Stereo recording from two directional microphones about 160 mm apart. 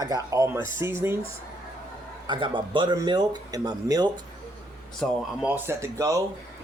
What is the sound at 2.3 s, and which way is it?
Speech, 30° right (ahead or behind).